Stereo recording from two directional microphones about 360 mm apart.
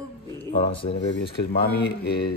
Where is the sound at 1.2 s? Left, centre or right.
Left.